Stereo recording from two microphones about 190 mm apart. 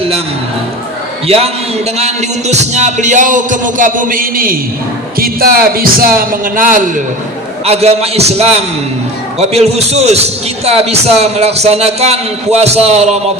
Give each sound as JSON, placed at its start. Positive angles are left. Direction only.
{"t": 2.0, "sound": "a man's voice", "side_deg": -35}
{"t": 7.6, "sound": "speech", "side_deg": -35}